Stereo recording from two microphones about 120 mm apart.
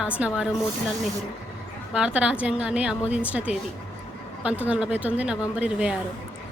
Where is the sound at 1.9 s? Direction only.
5° right (ahead or behind).